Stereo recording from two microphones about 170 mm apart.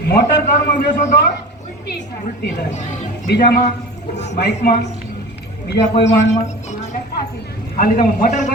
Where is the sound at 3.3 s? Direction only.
65° left (ahead or behind).